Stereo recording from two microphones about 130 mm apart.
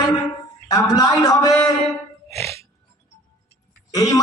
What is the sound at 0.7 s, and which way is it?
Speech, 30° left (ahead or behind).